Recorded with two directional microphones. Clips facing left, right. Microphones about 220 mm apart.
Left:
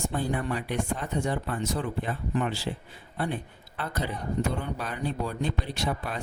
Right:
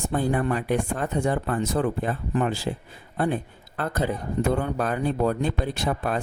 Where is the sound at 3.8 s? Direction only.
50° right (ahead or behind).